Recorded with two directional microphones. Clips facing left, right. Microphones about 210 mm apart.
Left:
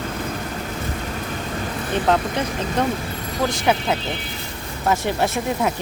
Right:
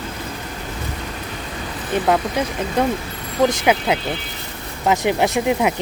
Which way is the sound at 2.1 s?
10° right (ahead or behind).